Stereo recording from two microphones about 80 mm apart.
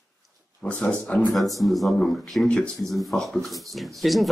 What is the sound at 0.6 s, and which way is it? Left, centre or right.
Speech, centre.